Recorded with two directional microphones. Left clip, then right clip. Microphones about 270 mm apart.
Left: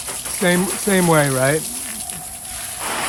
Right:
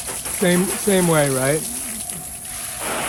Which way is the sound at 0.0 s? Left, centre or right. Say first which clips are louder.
Left 1 dB; centre.